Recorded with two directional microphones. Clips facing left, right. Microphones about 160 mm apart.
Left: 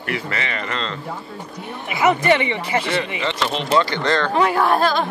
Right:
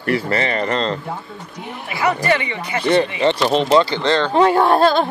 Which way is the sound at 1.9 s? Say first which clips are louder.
Left 2 dB; 20° left (ahead or behind).